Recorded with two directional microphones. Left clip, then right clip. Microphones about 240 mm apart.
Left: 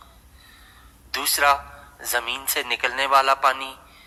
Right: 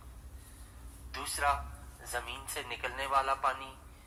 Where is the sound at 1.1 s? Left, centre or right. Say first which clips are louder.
Left 13 dB; left.